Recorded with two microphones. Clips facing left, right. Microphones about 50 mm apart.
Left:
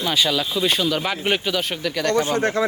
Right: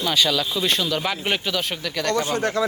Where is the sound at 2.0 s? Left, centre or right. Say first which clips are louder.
Left 2 dB; left.